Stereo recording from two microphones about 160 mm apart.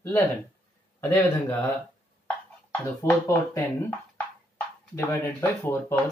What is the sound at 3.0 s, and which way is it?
Speech, 15° left (ahead or behind).